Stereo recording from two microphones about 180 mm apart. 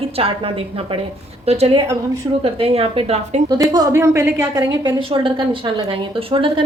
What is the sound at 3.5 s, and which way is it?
A woman's voice, 20° right (ahead or behind).